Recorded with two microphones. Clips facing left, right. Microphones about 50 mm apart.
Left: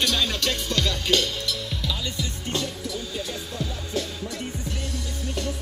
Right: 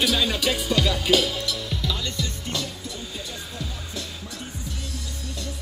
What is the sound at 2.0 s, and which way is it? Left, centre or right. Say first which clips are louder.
Music: right 1 dB; centre.